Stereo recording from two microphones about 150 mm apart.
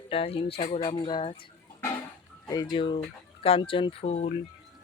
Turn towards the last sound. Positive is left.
turn(degrees=45)  # may be behind; listen again after turning